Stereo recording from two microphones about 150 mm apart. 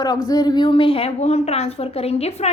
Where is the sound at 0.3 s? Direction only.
25° left (ahead or behind).